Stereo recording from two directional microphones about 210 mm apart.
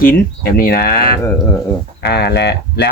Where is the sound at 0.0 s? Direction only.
45° left (ahead or behind).